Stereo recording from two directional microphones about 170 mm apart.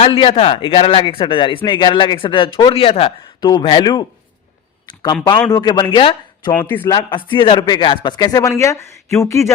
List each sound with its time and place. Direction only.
0.0 s a man's voice: 35° left (ahead or behind)
5.5 s speech: 25° left (ahead or behind)
6.5 s a man's voice: 10° left (ahead or behind)
6.9 s speech: 25° left (ahead or behind)